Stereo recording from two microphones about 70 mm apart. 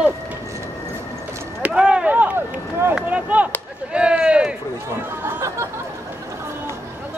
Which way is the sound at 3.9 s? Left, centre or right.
Centre.